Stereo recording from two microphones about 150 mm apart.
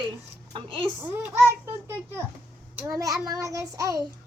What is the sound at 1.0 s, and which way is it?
Speech, 15° right (ahead or behind).